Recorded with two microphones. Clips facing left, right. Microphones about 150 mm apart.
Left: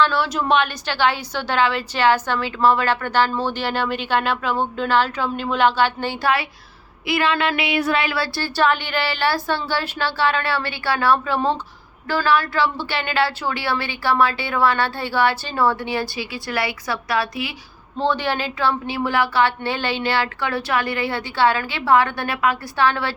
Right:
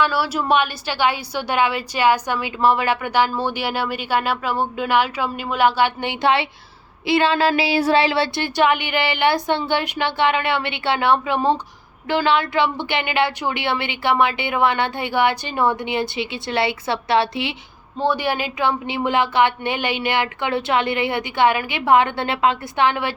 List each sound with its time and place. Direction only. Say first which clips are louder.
0.0 s a woman's voice: left 1 dB; 10° right (ahead or behind); by 17.5 s 25° right (ahead or behind)
17.9 s a woman's voice: right 1 dB; 10° right (ahead or behind)